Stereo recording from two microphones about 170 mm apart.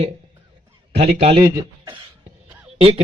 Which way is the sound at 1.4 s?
20° right (ahead or behind).